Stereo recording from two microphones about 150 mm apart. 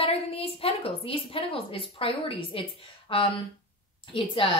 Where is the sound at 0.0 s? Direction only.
40° left (ahead or behind).